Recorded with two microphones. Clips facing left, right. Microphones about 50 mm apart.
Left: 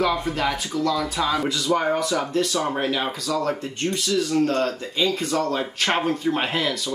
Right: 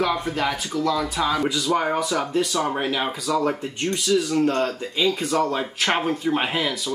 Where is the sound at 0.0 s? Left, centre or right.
Centre.